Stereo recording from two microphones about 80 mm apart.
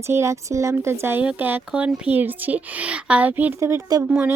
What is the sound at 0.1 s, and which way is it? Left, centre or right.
Speech, right.